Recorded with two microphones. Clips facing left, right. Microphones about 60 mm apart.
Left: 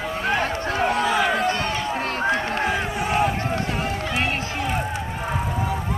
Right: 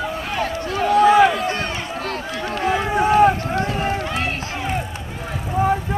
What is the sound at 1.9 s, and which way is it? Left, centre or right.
Run, left.